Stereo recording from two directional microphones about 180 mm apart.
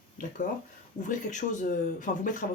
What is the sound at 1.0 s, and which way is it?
Speech, 45° left (ahead or behind).